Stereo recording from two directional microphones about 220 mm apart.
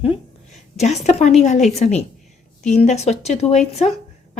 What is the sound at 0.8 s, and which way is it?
A woman's voice, 30° left (ahead or behind).